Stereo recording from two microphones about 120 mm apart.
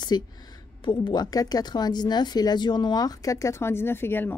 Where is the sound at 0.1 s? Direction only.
35° left (ahead or behind); by 4.4 s 15° left (ahead or behind).